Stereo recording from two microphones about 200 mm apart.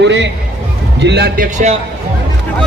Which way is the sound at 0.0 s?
60° right (ahead or behind).